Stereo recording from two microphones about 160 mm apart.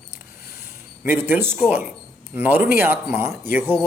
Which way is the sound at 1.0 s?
15° right (ahead or behind).